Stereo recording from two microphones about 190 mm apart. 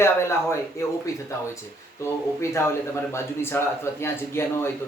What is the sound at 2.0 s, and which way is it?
Speech, 15° left (ahead or behind).